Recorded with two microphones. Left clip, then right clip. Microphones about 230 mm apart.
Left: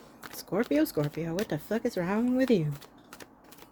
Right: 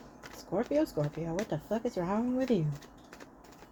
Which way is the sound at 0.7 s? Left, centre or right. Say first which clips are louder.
Left 2 dB; left.